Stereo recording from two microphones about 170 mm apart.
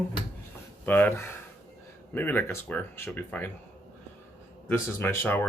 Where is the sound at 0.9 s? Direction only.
10° left (ahead or behind).